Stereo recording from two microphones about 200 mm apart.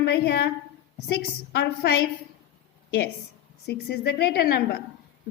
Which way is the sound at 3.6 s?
55° left (ahead or behind).